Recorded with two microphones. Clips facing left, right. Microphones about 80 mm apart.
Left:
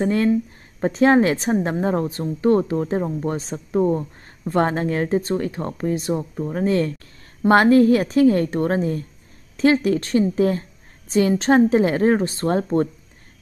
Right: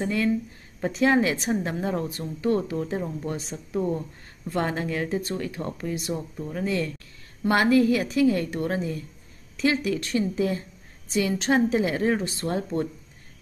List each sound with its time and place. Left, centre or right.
0.0 s a woman's voice: left